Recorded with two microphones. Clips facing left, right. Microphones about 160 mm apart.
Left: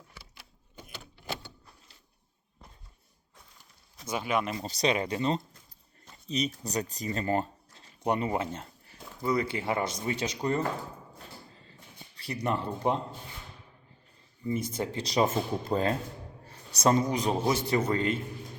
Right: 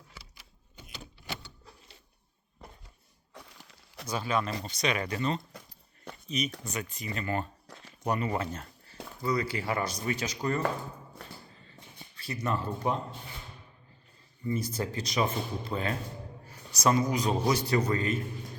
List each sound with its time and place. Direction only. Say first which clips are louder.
0.8 s a sound: left 1 dB; 50° left (ahead or behind)
3.3 s crushing: right 8 dB; 80° right
4.0 s speech: left 1 dB; 20° left (ahead or behind)
4.6 s speech: left 3 dB; 35° left (ahead or behind)
5.5 s a sound: right 9 dB; 75° right (ahead or behind)
6.2 s speech: left 2 dB; 35° left (ahead or behind)
7.7 s a sound: right 7 dB; 75° right (ahead or behind)
8.0 s speech: left 2 dB; 25° left (ahead or behind)
12.1 s speech: left 1 dB; 30° left (ahead or behind)
14.4 s a man's voice: left 1 dB; 20° left (ahead or behind)